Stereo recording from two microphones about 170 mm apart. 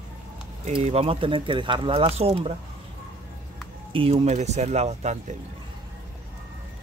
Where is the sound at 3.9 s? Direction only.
35° right (ahead or behind).